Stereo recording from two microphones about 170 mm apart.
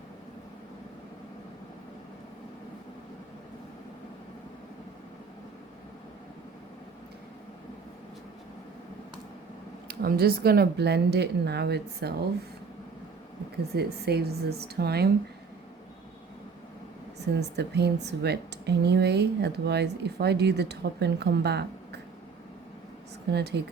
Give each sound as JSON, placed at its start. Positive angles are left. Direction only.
{"t": 9.9, "sound": "speech", "side_deg": -65}
{"t": 13.7, "sound": "speech", "side_deg": -70}
{"t": 17.3, "sound": "a woman's voice", "side_deg": -80}
{"t": 23.3, "sound": "speech", "side_deg": -80}